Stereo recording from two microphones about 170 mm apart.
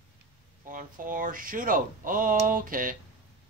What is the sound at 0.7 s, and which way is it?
Speech, 55° right (ahead or behind).